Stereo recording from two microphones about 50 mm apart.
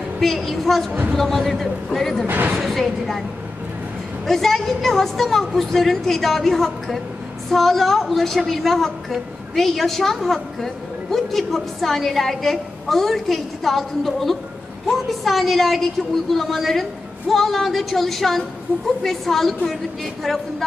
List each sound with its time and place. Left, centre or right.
0.2 s a woman's voice: centre
2.2 s speech: right
2.6 s a woman's voice: centre
4.3 s a woman's voice: centre